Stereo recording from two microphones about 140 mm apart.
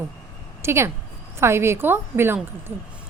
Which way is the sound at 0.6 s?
20° right (ahead or behind).